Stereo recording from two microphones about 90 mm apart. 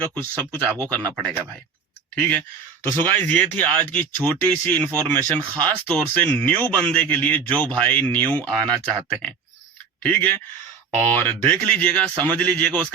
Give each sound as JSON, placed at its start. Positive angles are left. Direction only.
{"t": 0.0, "sound": "speech", "side_deg": 15}
{"t": 2.1, "sound": "speech", "side_deg": 15}